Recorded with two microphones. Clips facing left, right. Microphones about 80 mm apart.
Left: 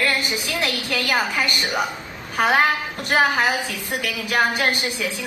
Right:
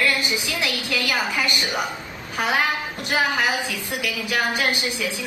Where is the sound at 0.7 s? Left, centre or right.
Left.